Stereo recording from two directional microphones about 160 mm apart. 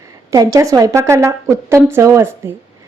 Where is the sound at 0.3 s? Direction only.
20° right (ahead or behind).